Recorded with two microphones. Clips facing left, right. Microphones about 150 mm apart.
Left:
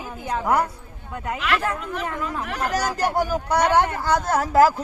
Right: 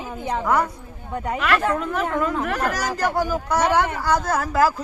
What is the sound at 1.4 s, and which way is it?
Speech, 45° right (ahead or behind).